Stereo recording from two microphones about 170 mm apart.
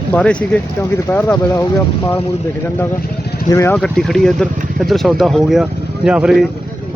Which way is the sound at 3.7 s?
Centre (ahead or behind).